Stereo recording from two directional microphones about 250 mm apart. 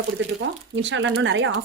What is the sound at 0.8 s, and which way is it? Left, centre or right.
Speech, right.